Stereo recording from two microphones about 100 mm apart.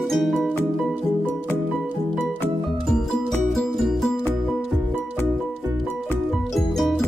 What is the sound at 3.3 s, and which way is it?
Music, centre (ahead or behind).